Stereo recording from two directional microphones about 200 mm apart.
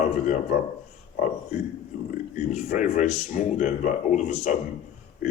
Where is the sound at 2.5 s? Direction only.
40° left (ahead or behind).